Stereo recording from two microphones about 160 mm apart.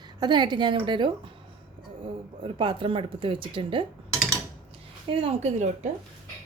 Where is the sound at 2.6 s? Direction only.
30° right (ahead or behind).